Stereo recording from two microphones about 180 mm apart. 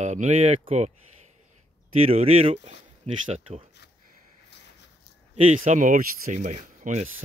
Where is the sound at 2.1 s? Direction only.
35° right (ahead or behind).